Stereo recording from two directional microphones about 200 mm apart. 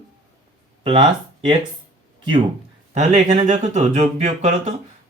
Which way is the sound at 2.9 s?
35° right (ahead or behind).